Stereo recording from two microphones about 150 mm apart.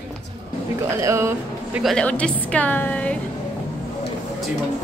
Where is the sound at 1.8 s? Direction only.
5° left (ahead or behind).